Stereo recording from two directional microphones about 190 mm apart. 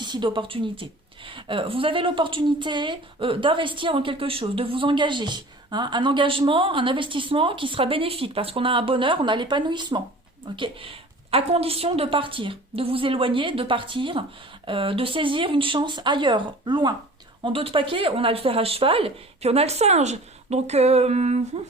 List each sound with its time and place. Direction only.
0.0 s a woman's voice: 25° right (ahead or behind)